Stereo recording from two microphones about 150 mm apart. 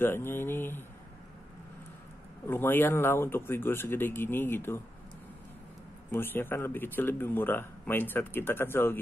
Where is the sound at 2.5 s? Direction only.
15° left (ahead or behind).